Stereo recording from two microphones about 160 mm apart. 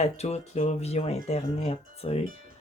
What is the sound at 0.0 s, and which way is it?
Speech, 40° left (ahead or behind).